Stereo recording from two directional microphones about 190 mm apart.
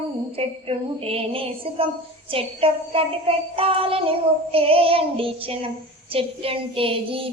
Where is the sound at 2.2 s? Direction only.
30° right (ahead or behind).